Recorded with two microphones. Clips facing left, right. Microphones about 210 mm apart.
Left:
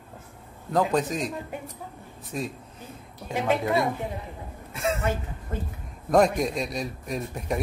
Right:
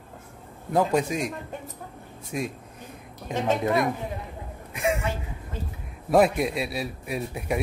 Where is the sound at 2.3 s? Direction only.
10° right (ahead or behind).